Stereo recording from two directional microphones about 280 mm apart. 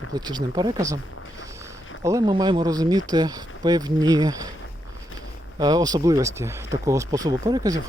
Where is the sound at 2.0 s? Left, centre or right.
Centre.